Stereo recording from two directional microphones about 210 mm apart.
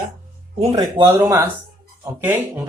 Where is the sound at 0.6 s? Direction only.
20° right (ahead or behind).